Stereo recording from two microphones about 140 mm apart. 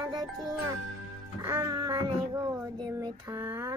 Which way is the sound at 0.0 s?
30° right (ahead or behind).